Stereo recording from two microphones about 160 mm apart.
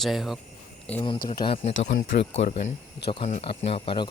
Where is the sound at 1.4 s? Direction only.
35° left (ahead or behind).